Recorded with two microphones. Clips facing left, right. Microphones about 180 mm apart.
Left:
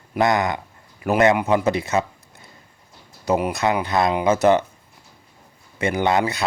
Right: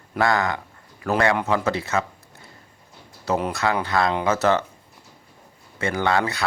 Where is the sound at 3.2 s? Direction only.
15° left (ahead or behind).